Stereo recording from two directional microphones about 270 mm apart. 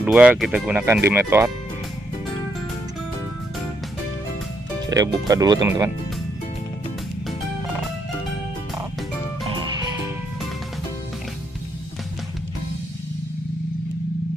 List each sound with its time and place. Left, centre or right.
0.0 s speech: centre
4.8 s speech: centre
9.4 s music: centre